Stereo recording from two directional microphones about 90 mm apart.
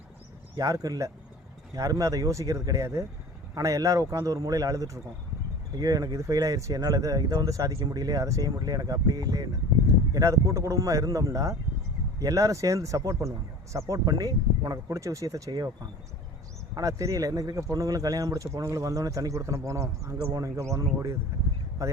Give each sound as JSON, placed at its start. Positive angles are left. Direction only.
{"t": 0.5, "sound": "speech", "side_deg": -45}